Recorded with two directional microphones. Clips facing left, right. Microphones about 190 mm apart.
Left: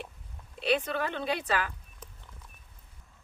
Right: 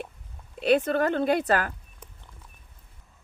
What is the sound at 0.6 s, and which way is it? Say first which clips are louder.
Speech: right 7 dB; 50° right (ahead or behind).